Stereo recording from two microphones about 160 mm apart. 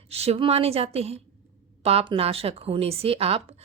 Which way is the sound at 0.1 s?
40° right (ahead or behind).